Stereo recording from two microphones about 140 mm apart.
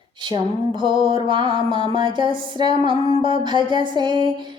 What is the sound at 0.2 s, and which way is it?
Music, 35° right (ahead or behind).